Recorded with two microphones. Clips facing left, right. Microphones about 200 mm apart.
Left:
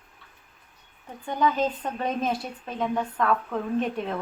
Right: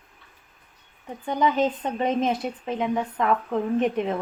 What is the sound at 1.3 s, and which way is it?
A woman's voice, 20° right (ahead or behind).